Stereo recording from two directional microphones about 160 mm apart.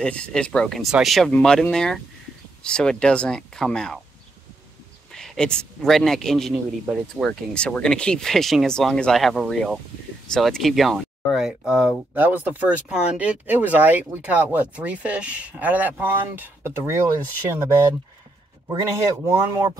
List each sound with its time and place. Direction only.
0.0 s a man's voice: 5° left (ahead or behind)
5.1 s a man's voice: centre (ahead or behind); by 17.0 s 15° right (ahead or behind)
18.7 s a man's voice: 20° right (ahead or behind)